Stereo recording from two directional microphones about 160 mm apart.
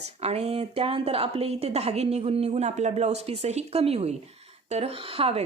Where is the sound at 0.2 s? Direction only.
40° right (ahead or behind).